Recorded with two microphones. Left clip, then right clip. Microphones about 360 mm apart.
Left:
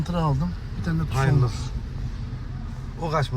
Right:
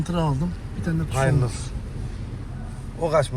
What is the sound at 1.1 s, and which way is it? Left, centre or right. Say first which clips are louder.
Speech: right 3 dB; centre.